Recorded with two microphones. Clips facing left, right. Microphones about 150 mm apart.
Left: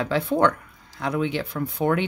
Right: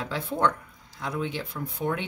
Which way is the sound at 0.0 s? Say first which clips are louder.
Left 6 dB; 70° left (ahead or behind).